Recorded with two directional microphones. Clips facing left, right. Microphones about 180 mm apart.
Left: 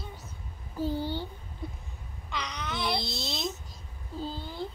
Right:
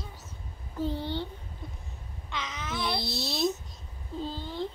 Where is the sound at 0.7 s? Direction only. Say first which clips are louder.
Left 1 dB; 5° left (ahead or behind).